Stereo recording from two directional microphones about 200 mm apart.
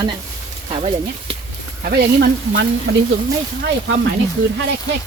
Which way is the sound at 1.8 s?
55° right (ahead or behind).